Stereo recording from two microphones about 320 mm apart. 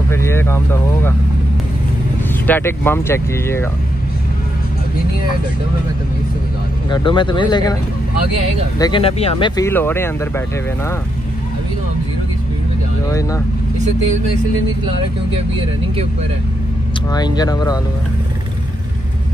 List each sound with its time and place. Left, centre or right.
0.1 s speech: centre
2.4 s speech: centre
6.9 s speech: centre
8.7 s speech: centre
13.1 s speech: centre
17.1 s speech: centre